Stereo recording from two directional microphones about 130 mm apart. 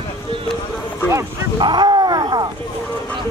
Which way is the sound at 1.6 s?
35° right (ahead or behind).